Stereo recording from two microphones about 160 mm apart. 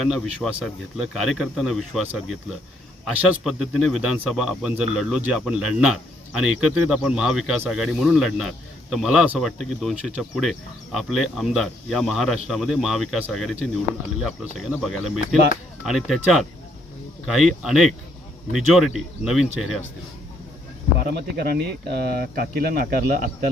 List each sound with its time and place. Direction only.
0.0 s speech: centre (ahead or behind)
21.0 s speech: 90° right
22.2 s speech: 70° right (ahead or behind)